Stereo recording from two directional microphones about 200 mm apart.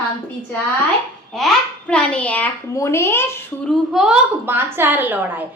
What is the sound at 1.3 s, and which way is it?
A child's voice, 5° left (ahead or behind).